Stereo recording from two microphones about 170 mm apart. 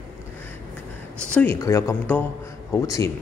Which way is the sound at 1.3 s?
15° left (ahead or behind).